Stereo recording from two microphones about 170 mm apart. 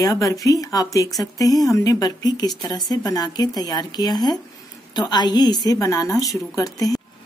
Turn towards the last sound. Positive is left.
turn(degrees=20)  # may be behind; listen again after turning